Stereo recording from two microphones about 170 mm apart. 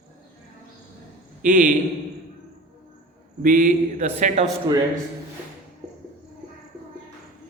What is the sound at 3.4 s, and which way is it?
Speech, 55° right (ahead or behind).